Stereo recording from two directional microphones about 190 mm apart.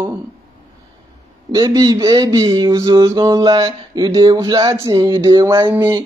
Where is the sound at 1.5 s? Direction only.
20° right (ahead or behind).